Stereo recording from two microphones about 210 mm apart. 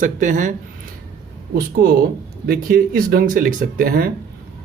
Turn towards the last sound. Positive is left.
turn(degrees=-45)  # may be behind; listen again after turning